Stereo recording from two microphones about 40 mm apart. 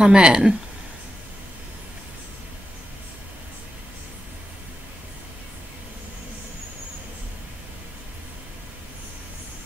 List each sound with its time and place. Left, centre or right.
0.0 s speech: right